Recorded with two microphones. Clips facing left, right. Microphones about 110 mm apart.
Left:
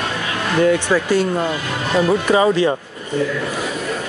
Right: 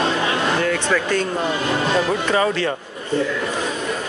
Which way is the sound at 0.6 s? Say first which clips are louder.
Left 4 dB; 15° left (ahead or behind).